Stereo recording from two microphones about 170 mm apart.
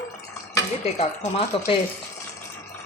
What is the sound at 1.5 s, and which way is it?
Speech, 30° left (ahead or behind).